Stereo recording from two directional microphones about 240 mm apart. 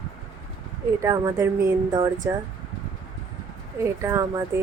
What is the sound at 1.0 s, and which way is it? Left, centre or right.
A woman's voice, centre.